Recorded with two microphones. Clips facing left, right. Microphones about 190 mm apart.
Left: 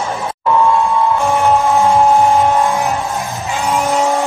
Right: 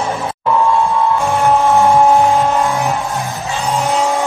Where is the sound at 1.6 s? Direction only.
15° right (ahead or behind).